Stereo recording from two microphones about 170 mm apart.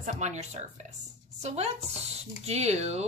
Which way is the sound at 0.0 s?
45° right (ahead or behind).